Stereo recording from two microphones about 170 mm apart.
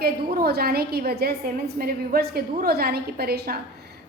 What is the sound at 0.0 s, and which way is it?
A woman's voice, 65° right (ahead or behind).